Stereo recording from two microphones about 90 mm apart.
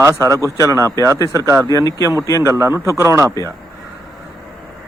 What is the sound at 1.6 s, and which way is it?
Speech, 40° left (ahead or behind).